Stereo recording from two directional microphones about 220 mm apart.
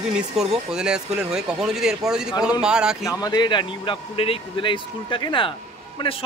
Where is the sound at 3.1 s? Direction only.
15° left (ahead or behind).